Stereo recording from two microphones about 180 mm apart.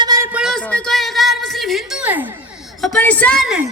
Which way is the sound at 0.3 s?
5° right (ahead or behind).